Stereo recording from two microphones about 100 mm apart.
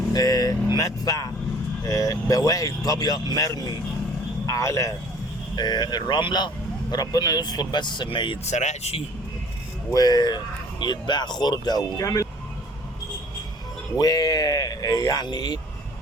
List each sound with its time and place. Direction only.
0.1 s vehicle: 40° left (ahead or behind)
0.8 s speech: 35° left (ahead or behind)
5.5 s speech: 45° left (ahead or behind)
8.8 s speech: 80° left
9.9 s speech: 40° left (ahead or behind)
13.9 s speech: 40° left (ahead or behind)